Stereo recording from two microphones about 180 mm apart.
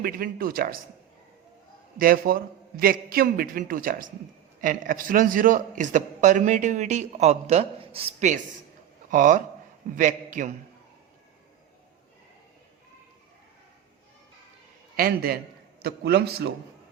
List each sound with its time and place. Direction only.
0.0 s a man's voice: 55° right (ahead or behind)
2.0 s a man's voice: 50° right (ahead or behind)
14.9 s a man's voice: 55° right (ahead or behind)